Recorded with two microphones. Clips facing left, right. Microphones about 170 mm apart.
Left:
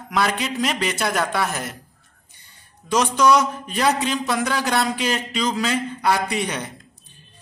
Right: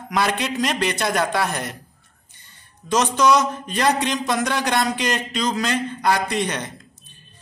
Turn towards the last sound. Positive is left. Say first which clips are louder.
# right 1 dB
turn(degrees=10)  # may be behind; listen again after turning